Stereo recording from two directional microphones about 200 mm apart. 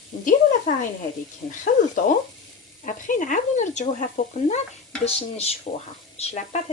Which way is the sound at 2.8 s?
40° left (ahead or behind).